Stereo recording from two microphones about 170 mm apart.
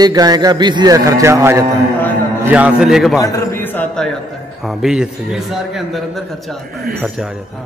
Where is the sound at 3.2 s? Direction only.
15° left (ahead or behind).